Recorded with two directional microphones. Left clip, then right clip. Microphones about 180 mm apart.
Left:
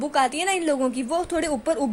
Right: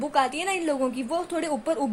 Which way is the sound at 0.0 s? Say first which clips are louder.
Left 2 dB; 20° left (ahead or behind).